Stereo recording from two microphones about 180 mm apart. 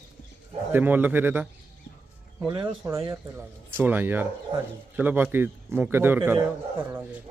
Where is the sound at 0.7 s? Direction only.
10° right (ahead or behind).